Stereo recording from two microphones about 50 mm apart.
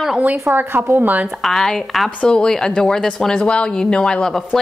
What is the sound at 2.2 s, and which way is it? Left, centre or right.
Speech, centre.